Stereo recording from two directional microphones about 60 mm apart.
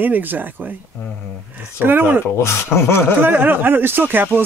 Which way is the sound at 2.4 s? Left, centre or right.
Left.